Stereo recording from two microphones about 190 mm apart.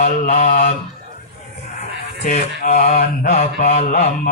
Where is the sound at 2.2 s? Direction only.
40° left (ahead or behind).